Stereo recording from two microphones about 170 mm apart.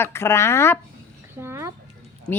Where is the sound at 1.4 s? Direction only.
15° right (ahead or behind).